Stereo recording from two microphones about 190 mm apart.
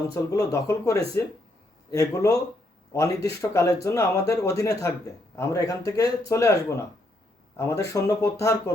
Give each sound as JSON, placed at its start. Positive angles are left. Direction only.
{"t": 0.1, "sound": "speech", "side_deg": 15}